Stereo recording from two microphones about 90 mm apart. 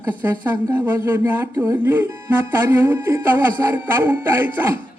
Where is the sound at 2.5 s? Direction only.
25° right (ahead or behind).